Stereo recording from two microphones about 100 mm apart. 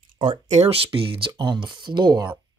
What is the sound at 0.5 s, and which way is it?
Speech, 80° right.